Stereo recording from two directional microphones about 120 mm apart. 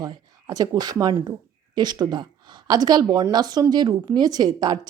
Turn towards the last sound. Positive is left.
turn(degrees=-35)  # may be behind; listen again after turning